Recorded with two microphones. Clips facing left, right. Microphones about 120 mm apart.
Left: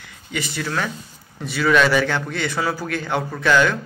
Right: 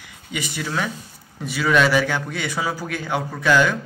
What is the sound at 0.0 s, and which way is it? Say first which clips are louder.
A man's voice: left 1 dB; 10° right (ahead or behind).